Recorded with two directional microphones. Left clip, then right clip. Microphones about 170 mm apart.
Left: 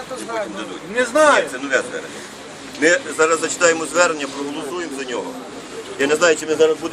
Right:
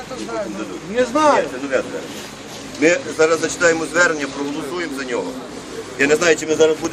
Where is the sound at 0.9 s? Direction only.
5° right (ahead or behind).